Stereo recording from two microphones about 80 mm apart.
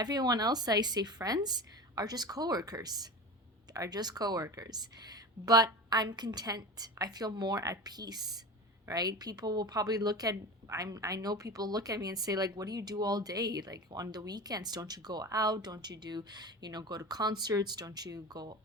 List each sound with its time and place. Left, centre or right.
0.0 s speech: right